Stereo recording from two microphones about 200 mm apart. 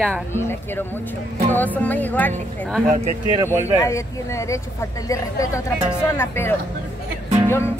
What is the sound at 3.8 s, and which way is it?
Speech, 15° left (ahead or behind).